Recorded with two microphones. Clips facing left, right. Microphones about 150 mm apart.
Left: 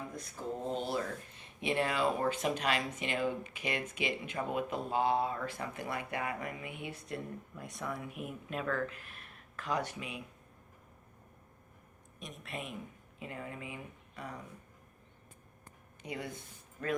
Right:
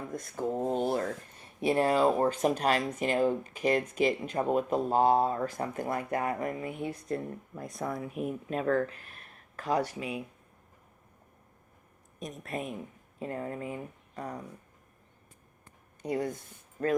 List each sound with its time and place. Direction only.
0.2 s speech: 55° right (ahead or behind)
1.6 s speech: 40° right (ahead or behind)
12.2 s speech: 40° right (ahead or behind)
16.0 s speech: 40° right (ahead or behind)
16.8 s speech: 30° right (ahead or behind)